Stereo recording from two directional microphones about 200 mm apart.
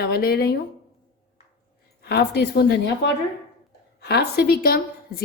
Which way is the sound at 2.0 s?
55° left (ahead or behind).